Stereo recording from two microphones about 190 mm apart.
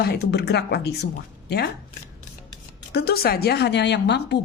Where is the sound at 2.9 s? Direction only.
55° left (ahead or behind).